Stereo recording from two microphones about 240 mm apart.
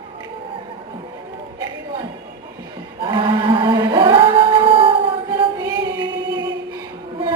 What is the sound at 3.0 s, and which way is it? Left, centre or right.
Chant, right.